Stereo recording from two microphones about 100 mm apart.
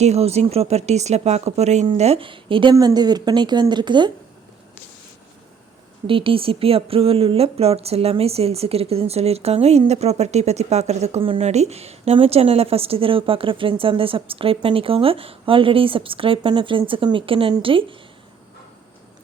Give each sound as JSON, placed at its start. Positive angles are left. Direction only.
{"t": 0.0, "sound": "speech", "side_deg": -90}
{"t": 2.0, "sound": "a woman's voice", "side_deg": -75}
{"t": 2.7, "sound": "a woman's voice", "side_deg": -45}
{"t": 6.1, "sound": "a woman's voice", "side_deg": -65}